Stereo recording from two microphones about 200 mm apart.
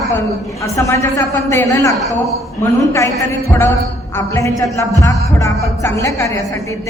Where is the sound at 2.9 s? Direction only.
15° left (ahead or behind).